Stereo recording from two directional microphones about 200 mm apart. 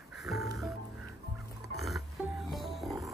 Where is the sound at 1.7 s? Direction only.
Centre (ahead or behind).